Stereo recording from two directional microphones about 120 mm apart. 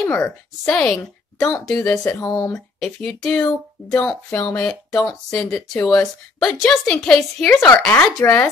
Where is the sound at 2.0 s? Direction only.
25° left (ahead or behind).